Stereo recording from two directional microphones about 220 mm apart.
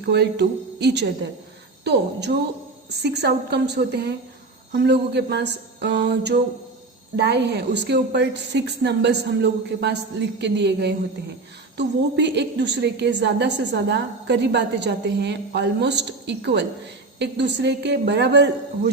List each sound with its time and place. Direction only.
0.0 s a woman's voice: 50° right (ahead or behind)